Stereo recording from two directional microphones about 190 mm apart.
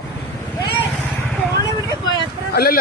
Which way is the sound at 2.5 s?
50° left (ahead or behind).